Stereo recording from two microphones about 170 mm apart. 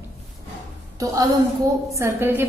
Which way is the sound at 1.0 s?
20° right (ahead or behind).